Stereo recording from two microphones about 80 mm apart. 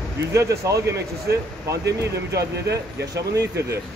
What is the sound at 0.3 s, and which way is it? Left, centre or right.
Speech, right.